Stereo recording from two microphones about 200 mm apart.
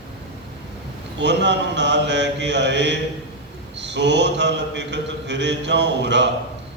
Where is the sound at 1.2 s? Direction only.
60° right (ahead or behind).